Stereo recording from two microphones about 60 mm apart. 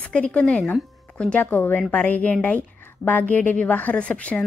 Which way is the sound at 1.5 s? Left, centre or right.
Left.